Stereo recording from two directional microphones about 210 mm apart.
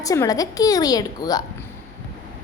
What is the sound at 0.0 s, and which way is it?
Speech, 15° left (ahead or behind).